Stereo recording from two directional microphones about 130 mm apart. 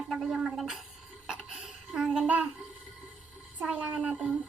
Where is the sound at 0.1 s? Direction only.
Centre (ahead or behind).